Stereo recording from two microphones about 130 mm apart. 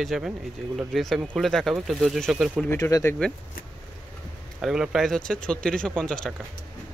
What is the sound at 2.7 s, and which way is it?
Speech, 25° left (ahead or behind).